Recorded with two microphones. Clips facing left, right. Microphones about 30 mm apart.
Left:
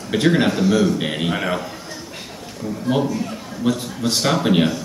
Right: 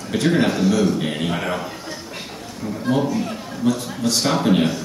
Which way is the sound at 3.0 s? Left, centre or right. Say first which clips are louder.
Even; centre.